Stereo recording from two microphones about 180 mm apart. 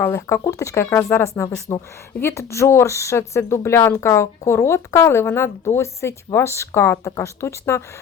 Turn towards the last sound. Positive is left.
turn(degrees=15)  # may be behind; listen again after turning